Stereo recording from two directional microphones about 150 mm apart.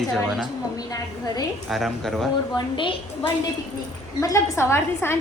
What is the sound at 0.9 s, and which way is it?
Speech, 25° left (ahead or behind).